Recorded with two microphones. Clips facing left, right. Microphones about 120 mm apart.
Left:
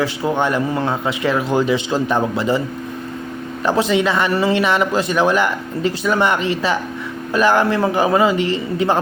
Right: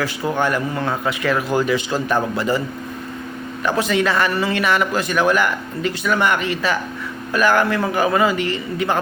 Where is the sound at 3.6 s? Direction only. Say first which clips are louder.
Left 2 dB; 30° left (ahead or behind).